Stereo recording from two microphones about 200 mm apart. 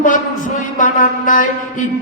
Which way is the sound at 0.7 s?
40° left (ahead or behind).